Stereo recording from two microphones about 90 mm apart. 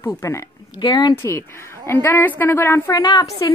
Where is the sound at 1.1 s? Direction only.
30° left (ahead or behind).